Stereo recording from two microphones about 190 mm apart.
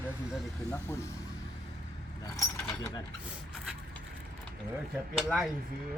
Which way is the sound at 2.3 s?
15° left (ahead or behind).